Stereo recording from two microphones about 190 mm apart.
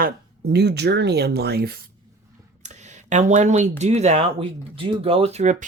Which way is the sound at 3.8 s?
35° right (ahead or behind).